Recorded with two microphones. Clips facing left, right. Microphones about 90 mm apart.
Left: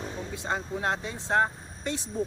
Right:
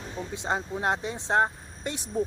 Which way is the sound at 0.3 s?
20° right (ahead or behind).